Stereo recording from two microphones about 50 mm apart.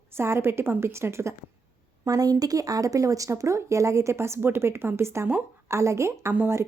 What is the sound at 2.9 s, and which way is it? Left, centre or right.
Speech, right.